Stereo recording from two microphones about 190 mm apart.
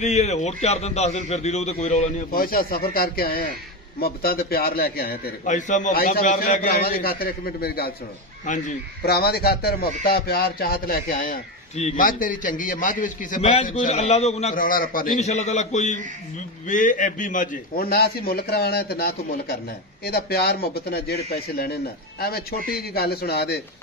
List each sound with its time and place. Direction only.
0.0 s a man's voice: 35° left (ahead or behind); by 7.9 s 55° left (ahead or behind)
8.5 s a man's voice: 40° left (ahead or behind)
9.0 s a man's voice: 55° left (ahead or behind)
11.7 s a man's voice: 40° left (ahead or behind); by 23.6 s 60° left (ahead or behind)